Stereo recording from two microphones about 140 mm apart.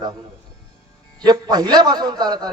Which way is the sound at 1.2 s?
30° right (ahead or behind).